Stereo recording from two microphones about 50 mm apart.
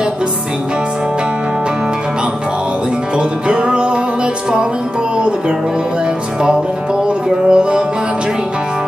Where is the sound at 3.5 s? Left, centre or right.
Right.